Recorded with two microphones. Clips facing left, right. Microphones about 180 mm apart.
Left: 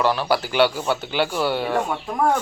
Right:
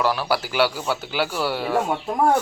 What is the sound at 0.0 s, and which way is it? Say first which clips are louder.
Speech: left 2 dB; 5° right (ahead or behind).